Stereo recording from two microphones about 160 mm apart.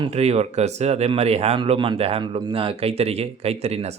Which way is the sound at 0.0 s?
40° right (ahead or behind).